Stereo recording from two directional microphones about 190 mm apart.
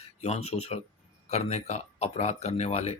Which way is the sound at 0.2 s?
35° left (ahead or behind).